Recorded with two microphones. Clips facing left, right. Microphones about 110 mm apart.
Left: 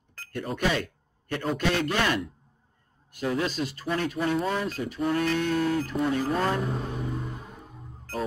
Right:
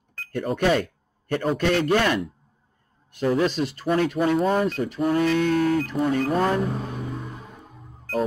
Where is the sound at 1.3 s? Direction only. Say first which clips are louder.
Right 5 dB; 50° right (ahead or behind).